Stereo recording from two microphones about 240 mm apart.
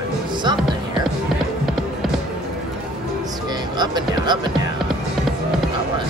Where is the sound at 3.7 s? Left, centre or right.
Centre.